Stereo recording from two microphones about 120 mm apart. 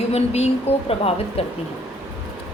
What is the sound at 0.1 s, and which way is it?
A woman's voice, 60° left (ahead or behind).